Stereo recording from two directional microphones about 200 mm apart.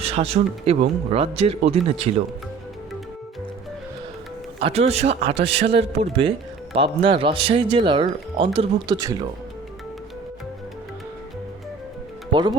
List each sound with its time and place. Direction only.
0.0 s speech: 30° right (ahead or behind)
4.6 s speech: 30° right (ahead or behind)
12.3 s speech: 20° right (ahead or behind)